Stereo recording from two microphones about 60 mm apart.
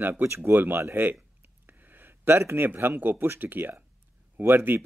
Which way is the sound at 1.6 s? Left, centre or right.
Right.